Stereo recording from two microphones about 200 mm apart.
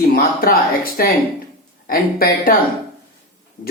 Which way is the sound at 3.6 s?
40° left (ahead or behind).